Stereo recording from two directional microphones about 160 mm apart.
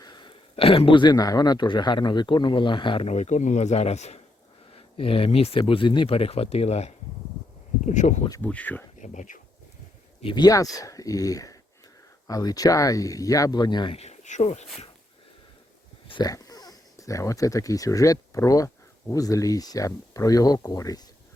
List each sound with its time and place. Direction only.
0.0 s speech: 30° left (ahead or behind); by 8.3 s 50° left (ahead or behind)
8.4 s speech: 10° left (ahead or behind)
9.0 s speech: 50° left (ahead or behind)
10.2 s speech: 30° left (ahead or behind)
14.0 s speech: 45° left (ahead or behind)
16.0 s speech: 25° left (ahead or behind)